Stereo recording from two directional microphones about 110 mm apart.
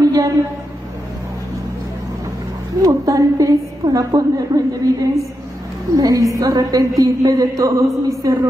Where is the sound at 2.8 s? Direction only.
30° right (ahead or behind).